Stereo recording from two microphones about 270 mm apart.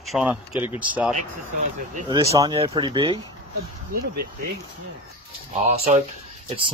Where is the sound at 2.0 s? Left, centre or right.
Centre.